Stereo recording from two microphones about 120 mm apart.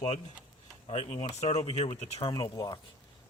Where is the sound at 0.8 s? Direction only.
55° left (ahead or behind).